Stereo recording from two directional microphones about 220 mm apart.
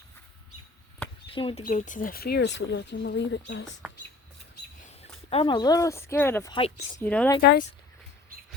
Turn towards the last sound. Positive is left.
turn(degrees=45)  # may be behind; listen again after turning